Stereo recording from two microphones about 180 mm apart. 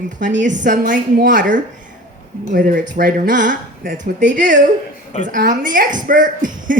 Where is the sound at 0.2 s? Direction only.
45° right (ahead or behind).